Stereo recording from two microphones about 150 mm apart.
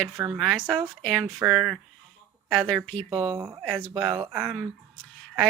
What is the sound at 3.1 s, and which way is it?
Speech, 25° right (ahead or behind).